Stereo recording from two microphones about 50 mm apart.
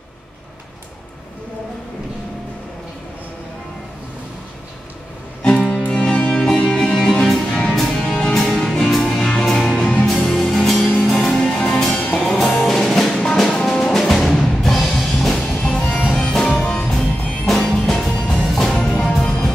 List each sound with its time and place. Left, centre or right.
5.4 s music: centre
12.0 s music: left
12.3 s music: centre
15.5 s music: left
16.2 s music: centre
18.5 s music: centre
18.8 s music: left